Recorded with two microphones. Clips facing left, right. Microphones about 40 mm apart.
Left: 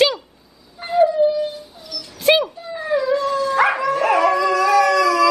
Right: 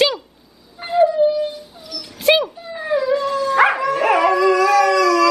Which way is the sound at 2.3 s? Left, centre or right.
Centre.